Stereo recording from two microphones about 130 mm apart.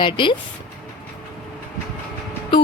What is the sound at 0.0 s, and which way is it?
Speech, 40° left (ahead or behind).